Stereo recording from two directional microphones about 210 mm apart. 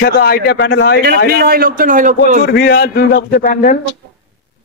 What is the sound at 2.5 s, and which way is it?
A man's voice, 50° left (ahead or behind).